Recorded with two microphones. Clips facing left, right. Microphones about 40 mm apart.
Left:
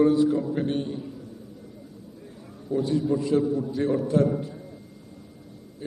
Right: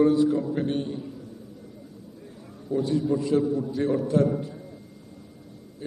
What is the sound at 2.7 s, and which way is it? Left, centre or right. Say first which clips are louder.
A man's voice: even; centre.